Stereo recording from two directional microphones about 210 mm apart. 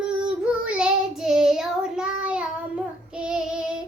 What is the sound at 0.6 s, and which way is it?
Child singing, 5° right (ahead or behind).